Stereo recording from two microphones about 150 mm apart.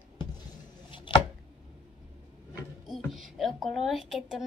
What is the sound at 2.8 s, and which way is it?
A woman's voice, centre (ahead or behind).